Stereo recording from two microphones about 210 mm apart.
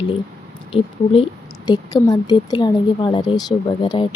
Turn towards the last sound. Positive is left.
turn(degrees=20)  # may be behind; listen again after turning